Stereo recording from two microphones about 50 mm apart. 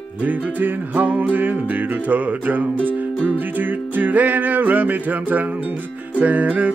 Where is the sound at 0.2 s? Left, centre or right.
Right.